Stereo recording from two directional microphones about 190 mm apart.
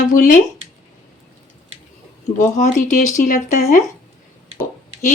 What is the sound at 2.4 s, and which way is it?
Speech, 40° left (ahead or behind).